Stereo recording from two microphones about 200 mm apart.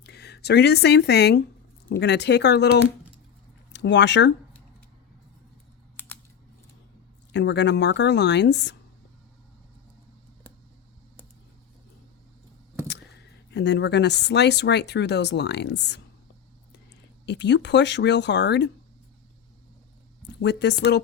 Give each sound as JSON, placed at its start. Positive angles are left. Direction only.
{"t": 0.0, "sound": "speech", "side_deg": 55}
{"t": 6.0, "sound": "a sound", "side_deg": 10}
{"t": 7.3, "sound": "speech", "side_deg": 60}
{"t": 13.5, "sound": "speech", "side_deg": 60}
{"t": 17.2, "sound": "speech", "side_deg": 60}
{"t": 20.4, "sound": "speech", "side_deg": 60}